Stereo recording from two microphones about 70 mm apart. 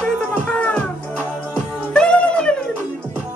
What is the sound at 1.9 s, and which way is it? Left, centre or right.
Music, centre.